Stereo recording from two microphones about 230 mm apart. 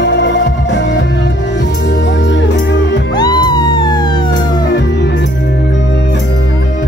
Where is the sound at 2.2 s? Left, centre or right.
Left.